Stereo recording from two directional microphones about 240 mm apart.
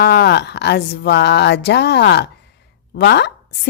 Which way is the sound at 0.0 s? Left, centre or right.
Left.